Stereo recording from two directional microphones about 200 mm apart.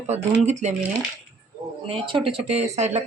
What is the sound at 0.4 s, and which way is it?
Speech, 35° right (ahead or behind).